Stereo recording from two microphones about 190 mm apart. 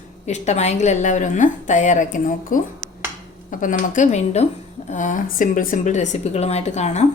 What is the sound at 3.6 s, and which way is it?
A woman's voice, 40° left (ahead or behind).